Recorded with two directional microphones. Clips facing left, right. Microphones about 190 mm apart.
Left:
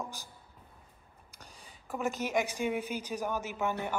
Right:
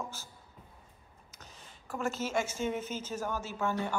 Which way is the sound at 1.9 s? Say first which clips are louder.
Left 1 dB; 15° left (ahead or behind).